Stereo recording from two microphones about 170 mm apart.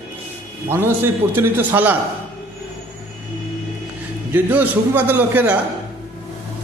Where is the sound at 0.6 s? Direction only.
10° right (ahead or behind).